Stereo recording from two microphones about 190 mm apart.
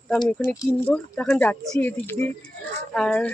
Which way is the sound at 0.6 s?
10° left (ahead or behind).